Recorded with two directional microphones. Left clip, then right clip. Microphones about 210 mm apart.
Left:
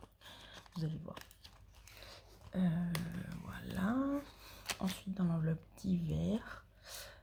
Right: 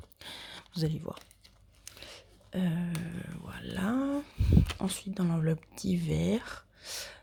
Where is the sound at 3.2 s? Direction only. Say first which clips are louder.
Right 6 dB; 30° right (ahead or behind).